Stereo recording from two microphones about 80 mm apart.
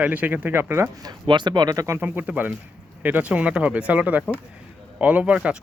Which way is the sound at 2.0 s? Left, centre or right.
Right.